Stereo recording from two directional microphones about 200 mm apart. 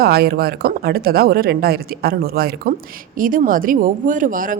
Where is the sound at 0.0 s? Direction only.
50° right (ahead or behind).